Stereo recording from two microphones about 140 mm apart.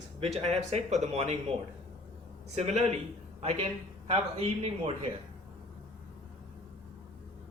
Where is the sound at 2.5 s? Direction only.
55° right (ahead or behind).